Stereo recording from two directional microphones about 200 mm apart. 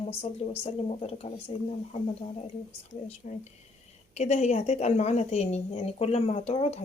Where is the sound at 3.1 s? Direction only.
35° left (ahead or behind).